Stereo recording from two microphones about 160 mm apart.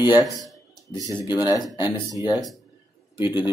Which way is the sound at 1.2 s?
25° left (ahead or behind).